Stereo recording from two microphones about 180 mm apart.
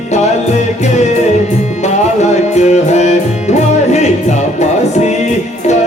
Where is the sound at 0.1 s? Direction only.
40° left (ahead or behind).